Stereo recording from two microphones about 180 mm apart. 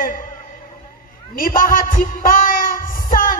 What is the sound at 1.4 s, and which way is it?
Speech, 50° left (ahead or behind).